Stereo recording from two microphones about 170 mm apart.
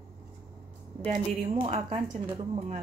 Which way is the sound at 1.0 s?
35° right (ahead or behind).